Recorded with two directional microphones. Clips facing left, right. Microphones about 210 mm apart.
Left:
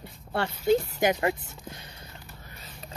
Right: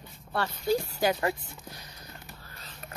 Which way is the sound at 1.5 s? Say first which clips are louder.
Left 3 dB; 25° left (ahead or behind).